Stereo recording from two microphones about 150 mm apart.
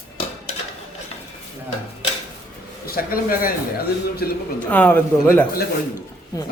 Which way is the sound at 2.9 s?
75° left (ahead or behind).